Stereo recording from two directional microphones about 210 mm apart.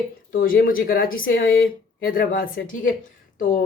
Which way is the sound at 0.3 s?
45° left (ahead or behind).